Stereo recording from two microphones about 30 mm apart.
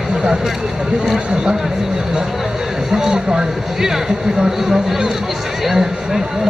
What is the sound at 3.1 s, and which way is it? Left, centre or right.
Speech, right.